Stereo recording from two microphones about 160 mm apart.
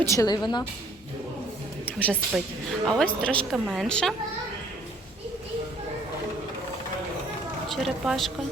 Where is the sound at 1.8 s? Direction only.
10° left (ahead or behind).